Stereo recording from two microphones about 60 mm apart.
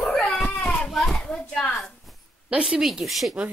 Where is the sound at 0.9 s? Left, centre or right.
Centre.